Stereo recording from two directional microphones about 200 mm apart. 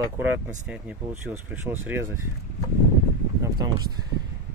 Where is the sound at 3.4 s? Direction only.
20° right (ahead or behind).